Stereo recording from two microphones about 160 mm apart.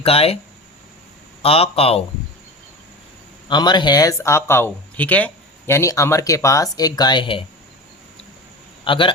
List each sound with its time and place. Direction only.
0.0 s speech: 35° left (ahead or behind)
1.4 s speech: 35° left (ahead or behind)
3.5 s speech: 25° left (ahead or behind)
8.8 s a man's voice: 30° left (ahead or behind)